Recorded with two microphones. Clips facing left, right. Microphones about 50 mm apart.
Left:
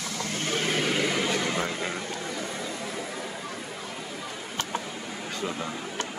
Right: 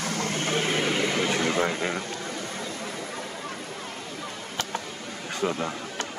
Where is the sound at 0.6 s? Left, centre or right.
Centre.